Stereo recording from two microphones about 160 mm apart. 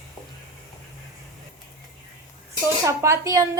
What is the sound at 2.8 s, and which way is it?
Speech, 20° right (ahead or behind).